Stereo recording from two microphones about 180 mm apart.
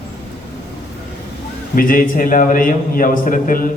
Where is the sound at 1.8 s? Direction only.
50° left (ahead or behind).